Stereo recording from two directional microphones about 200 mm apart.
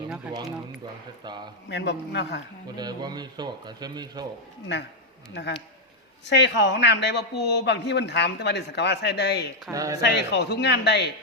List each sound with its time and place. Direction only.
1.7 s a man's voice: 60° left (ahead or behind)
2.7 s speech: 20° right (ahead or behind)
5.3 s a man's voice: 60° left (ahead or behind)
9.7 s speech: 15° right (ahead or behind)
10.0 s a man's voice: 60° left (ahead or behind)